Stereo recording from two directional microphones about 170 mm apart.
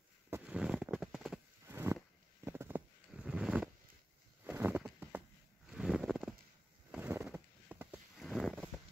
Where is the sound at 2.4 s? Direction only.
15° right (ahead or behind).